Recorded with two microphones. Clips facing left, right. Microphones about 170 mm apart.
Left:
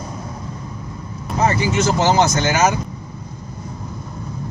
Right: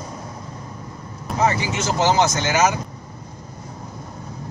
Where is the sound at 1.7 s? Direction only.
50° left (ahead or behind).